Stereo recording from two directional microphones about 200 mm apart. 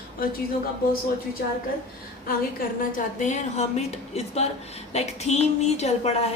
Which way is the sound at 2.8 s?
40° left (ahead or behind).